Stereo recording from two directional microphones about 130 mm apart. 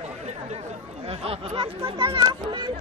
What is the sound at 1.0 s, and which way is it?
Speech, 50° right (ahead or behind).